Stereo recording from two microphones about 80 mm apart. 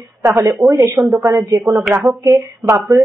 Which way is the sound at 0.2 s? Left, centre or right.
Right.